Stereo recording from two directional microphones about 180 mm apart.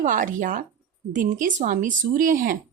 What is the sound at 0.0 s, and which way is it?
Speech, 45° right (ahead or behind).